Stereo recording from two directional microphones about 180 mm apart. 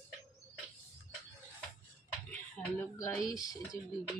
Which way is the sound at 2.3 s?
10° left (ahead or behind).